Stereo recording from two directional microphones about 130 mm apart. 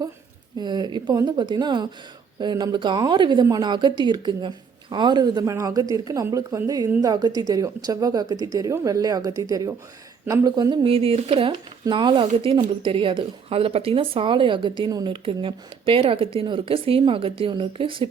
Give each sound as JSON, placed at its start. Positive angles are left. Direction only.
{"t": 0.6, "sound": "speech", "side_deg": -35}
{"t": 10.8, "sound": "speech", "side_deg": -45}